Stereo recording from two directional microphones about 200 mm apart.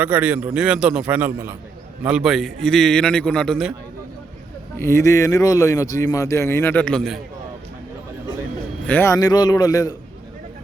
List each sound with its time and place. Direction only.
0.0 s a man's voice: 10° right (ahead or behind)
4.8 s speech: 15° left (ahead or behind)
8.9 s speech: 10° left (ahead or behind)